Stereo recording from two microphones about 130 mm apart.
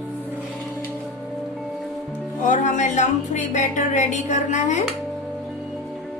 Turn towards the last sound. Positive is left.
turn(degrees=70)  # may be behind; listen again after turning